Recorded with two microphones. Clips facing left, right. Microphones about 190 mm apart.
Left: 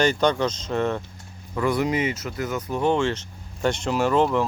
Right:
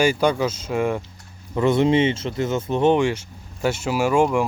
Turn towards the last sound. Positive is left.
turn(degrees=-10)  # may be behind; listen again after turning